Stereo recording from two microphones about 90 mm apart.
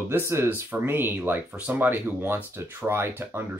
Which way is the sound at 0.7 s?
25° right (ahead or behind).